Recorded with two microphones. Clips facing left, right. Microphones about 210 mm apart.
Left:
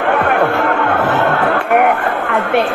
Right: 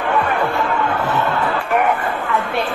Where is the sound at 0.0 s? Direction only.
65° left (ahead or behind).